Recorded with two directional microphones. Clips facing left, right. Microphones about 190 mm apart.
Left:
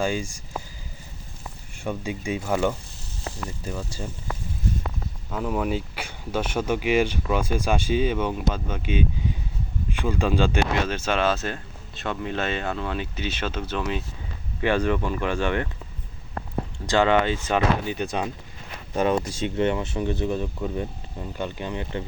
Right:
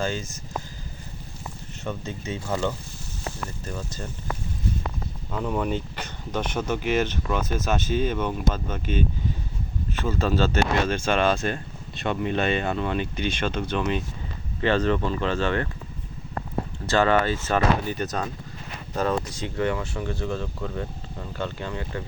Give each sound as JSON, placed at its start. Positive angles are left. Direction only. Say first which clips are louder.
{"t": 0.0, "sound": "speech", "louder": "left 3 dB", "side_deg": 10}
{"t": 1.8, "sound": "speech", "louder": "left 3 dB", "side_deg": 10}
{"t": 5.3, "sound": "speech", "louder": "left 1 dB", "side_deg": 5}
{"t": 9.9, "sound": "speech", "louder": "left 1 dB", "side_deg": 15}
{"t": 16.8, "sound": "speech", "louder": "left 1 dB", "side_deg": 15}
{"t": 19.3, "sound": "speech", "louder": "left 3 dB", "side_deg": 25}